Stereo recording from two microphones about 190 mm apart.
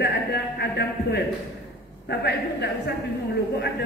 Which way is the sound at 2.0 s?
60° left (ahead or behind).